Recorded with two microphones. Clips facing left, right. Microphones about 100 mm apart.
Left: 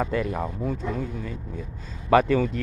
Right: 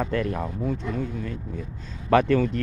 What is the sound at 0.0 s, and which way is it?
Speech, 5° left (ahead or behind).